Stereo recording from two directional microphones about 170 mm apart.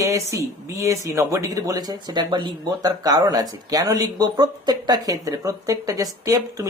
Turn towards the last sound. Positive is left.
turn(degrees=-20)  # may be behind; listen again after turning